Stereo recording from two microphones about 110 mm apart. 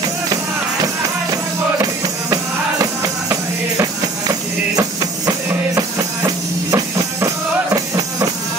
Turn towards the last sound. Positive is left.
turn(degrees=-30)  # may be behind; listen again after turning